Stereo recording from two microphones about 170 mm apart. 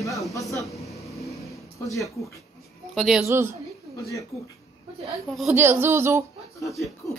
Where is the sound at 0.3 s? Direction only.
20° left (ahead or behind).